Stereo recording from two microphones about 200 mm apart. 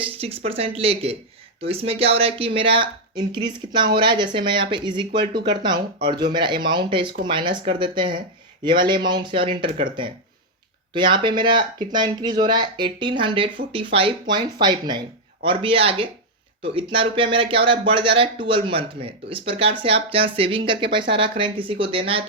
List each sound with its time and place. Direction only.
0.0 s speech: 30° right (ahead or behind)
10.9 s speech: 25° right (ahead or behind)